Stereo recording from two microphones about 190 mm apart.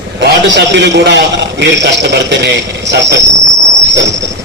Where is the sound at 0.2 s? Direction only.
65° right (ahead or behind).